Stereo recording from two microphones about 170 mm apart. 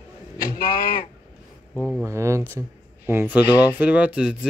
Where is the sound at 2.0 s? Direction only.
15° right (ahead or behind).